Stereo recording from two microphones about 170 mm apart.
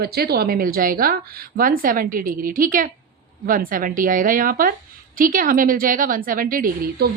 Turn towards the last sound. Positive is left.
turn(degrees=-55)  # may be behind; listen again after turning